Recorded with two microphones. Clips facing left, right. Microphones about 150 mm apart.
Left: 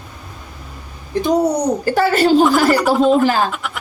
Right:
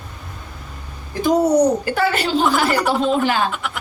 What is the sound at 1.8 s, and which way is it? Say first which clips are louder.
Speech: left 6 dB; 40° left (ahead or behind).